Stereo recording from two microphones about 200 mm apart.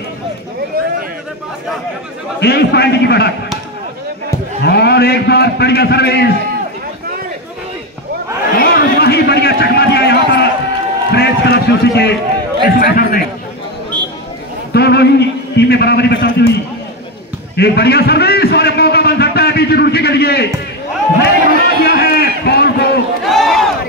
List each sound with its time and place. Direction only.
2.4 s a man's voice: 55° left (ahead or behind)
4.6 s a man's voice: 55° left (ahead or behind)
8.5 s a sound: 50° left (ahead or behind)
11.1 s run: 55° left (ahead or behind)
12.8 s a man's voice: 45° left (ahead or behind)
14.7 s a man's voice: 55° left (ahead or behind)
17.6 s a sound: 55° left (ahead or behind)
23.2 s crowd: centre (ahead or behind)